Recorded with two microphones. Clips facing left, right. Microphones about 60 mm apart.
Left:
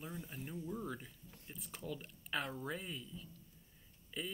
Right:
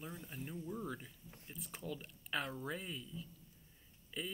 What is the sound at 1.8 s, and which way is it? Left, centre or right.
Speech, centre.